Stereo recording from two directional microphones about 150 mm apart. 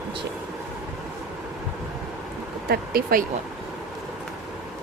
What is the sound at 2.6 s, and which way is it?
Speech, 85° right.